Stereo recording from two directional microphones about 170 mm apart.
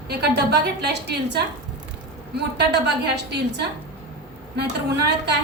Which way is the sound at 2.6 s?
75° right (ahead or behind).